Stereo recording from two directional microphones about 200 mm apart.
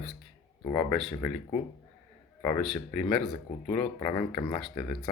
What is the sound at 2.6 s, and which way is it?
Speech, 5° left (ahead or behind).